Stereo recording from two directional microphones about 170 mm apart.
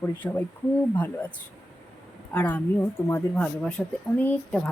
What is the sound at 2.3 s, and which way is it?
Speech, 10° left (ahead or behind).